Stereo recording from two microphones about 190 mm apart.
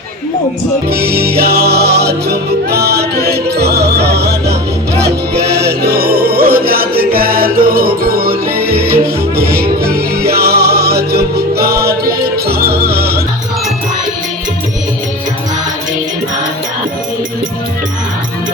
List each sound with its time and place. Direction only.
0.9 s music: 55° right (ahead or behind)